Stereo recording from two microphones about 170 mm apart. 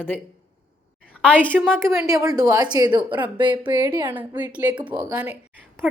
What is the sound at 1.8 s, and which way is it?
A woman's voice, 15° right (ahead or behind).